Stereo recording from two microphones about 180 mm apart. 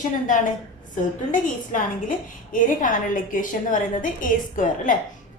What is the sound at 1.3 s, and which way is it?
A woman's voice, 45° left (ahead or behind).